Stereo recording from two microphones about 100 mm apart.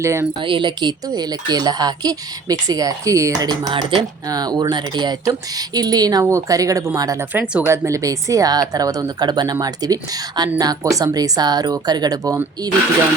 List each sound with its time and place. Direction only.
0.0 s speech: 30° right (ahead or behind)
0.3 s a woman's voice: 55° right (ahead or behind); by 3.5 s 30° right (ahead or behind)
3.5 s speech: 55° right (ahead or behind)
4.3 s a woman's voice: 40° right (ahead or behind)
7.4 s speech: 10° right (ahead or behind)
7.7 s a woman's voice: 30° right (ahead or behind)